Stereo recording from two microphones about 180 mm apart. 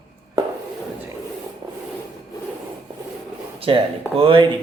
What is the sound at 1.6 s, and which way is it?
Rub, 20° right (ahead or behind).